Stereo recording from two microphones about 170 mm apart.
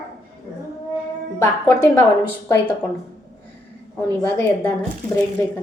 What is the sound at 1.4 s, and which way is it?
Speech, 15° left (ahead or behind).